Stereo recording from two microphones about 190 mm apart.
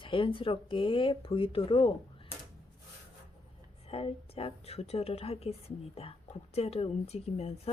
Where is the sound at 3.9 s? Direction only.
30° left (ahead or behind).